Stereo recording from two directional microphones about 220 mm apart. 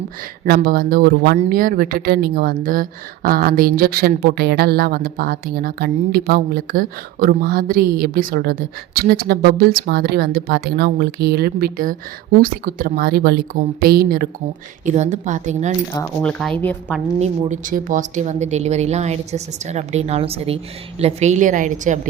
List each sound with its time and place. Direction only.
0.4 s a woman's voice: 40° right (ahead or behind)
16.0 s a woman's voice: 15° left (ahead or behind)
17.2 s speech: 35° right (ahead or behind)